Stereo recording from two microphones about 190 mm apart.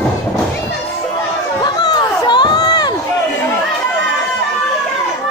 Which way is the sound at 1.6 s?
20° left (ahead or behind).